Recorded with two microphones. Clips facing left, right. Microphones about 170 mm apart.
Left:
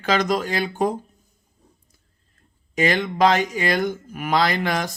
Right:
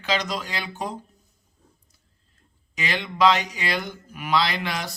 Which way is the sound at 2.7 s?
45° left (ahead or behind).